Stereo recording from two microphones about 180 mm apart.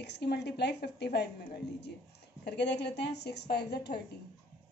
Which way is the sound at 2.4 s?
70° left (ahead or behind).